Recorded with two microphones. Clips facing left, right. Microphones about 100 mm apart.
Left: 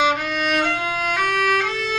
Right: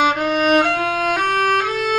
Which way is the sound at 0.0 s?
45° right (ahead or behind).